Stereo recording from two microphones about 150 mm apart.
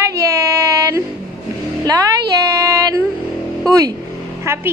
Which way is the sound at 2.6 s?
20° right (ahead or behind).